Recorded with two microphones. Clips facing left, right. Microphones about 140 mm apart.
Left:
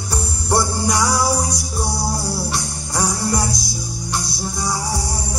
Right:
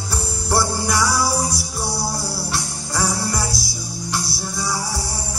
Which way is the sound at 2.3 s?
20° left (ahead or behind).